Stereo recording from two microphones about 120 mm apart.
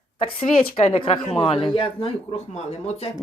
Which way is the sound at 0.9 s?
50° left (ahead or behind).